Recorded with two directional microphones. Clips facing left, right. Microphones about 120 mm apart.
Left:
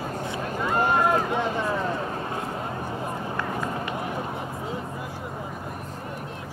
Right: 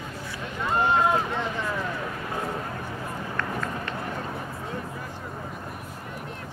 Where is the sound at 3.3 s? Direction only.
20° left (ahead or behind).